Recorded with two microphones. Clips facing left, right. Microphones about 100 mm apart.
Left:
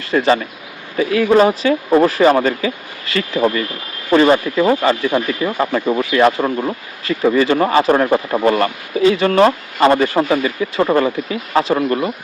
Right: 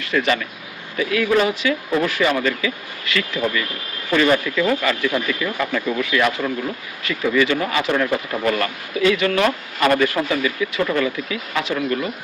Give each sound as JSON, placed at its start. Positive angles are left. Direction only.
{"t": 0.0, "sound": "speech", "side_deg": 35}